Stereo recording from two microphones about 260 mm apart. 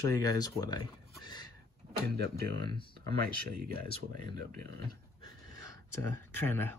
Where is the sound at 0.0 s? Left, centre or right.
Centre.